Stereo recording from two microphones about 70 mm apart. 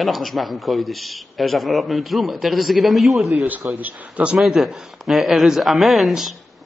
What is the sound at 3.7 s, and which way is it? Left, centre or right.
Speech, right.